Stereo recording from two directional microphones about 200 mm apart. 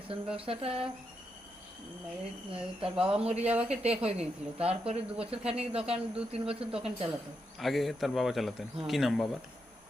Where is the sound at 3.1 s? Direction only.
30° right (ahead or behind).